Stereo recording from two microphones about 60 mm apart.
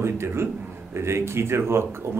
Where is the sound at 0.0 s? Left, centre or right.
Right.